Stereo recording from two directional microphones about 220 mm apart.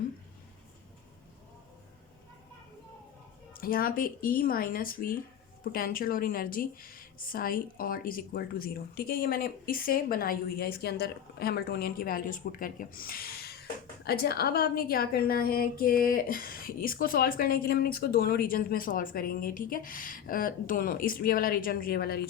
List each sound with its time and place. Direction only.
3.5 s speech: 40° left (ahead or behind)